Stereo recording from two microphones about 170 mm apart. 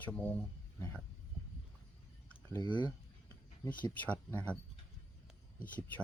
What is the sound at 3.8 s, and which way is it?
Speech, 10° left (ahead or behind).